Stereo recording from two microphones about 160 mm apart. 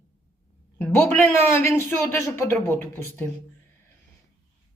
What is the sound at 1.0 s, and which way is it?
Speech, 10° left (ahead or behind).